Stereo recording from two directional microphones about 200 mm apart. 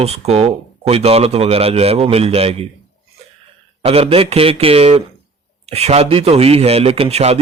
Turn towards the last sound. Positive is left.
turn(degrees=-30)  # may be behind; listen again after turning